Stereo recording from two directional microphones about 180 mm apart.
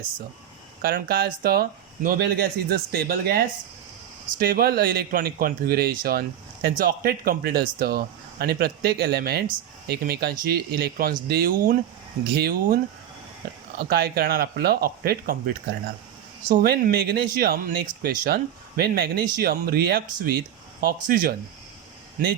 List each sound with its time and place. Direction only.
0.8 s speech: 60° right (ahead or behind)
16.5 s speech: 50° right (ahead or behind)